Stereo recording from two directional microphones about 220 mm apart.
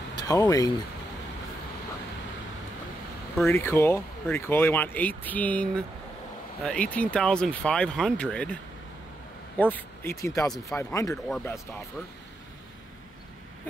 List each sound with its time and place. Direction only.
0.1 s speech: 15° left (ahead or behind)
3.4 s speech: 10° left (ahead or behind)
9.6 s speech: 10° left (ahead or behind)
11.2 s speech: centre (ahead or behind)